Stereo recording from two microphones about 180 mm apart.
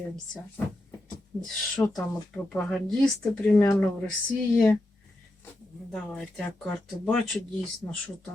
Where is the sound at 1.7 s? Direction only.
15° left (ahead or behind).